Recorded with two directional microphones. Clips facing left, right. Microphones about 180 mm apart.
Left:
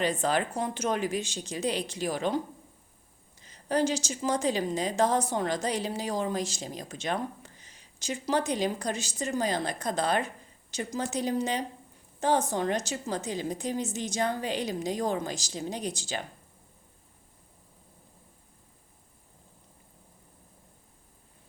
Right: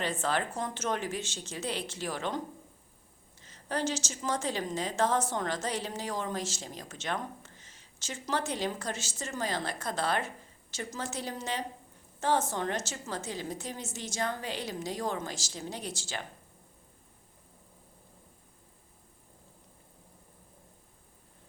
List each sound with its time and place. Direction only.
0.0 s speech: 15° left (ahead or behind)
3.4 s speech: 15° left (ahead or behind)